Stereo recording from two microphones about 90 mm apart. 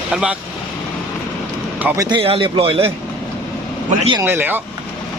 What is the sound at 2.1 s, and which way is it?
Speech, 75° right (ahead or behind).